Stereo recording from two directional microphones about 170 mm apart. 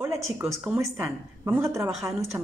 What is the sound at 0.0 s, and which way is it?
Speech, 15° right (ahead or behind).